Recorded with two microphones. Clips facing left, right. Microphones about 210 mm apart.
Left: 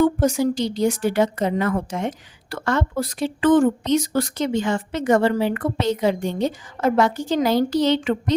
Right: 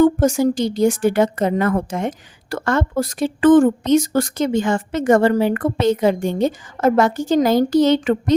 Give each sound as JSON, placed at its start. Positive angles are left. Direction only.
{"t": 0.0, "sound": "a woman's voice", "side_deg": -45}